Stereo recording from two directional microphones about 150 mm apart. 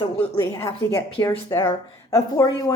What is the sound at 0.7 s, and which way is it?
Speech, 20° left (ahead or behind).